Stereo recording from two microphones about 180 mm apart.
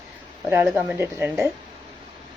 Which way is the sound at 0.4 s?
10° right (ahead or behind).